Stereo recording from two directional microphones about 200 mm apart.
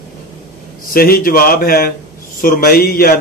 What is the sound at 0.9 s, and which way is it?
Speech, 45° left (ahead or behind).